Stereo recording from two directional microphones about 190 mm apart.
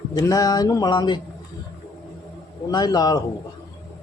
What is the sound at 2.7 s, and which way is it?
Speech, 20° left (ahead or behind).